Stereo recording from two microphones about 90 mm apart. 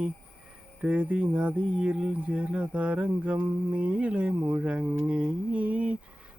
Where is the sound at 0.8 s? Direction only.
15° right (ahead or behind).